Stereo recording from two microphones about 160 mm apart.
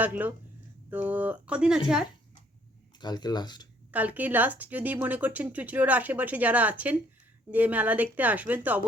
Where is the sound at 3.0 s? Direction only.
25° left (ahead or behind).